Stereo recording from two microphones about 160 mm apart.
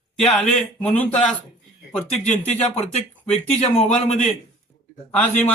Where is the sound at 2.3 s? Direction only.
40° left (ahead or behind).